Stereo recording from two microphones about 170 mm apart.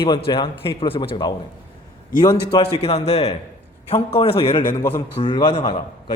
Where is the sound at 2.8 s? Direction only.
40° left (ahead or behind).